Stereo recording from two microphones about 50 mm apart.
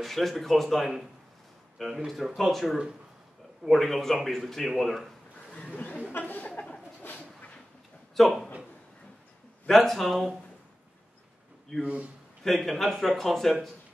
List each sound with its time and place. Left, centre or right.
0.0 s a man's voice: centre
5.6 s a sound: left
8.2 s a man's voice: centre
9.7 s a man's voice: centre
11.8 s a man's voice: right
12.4 s a man's voice: centre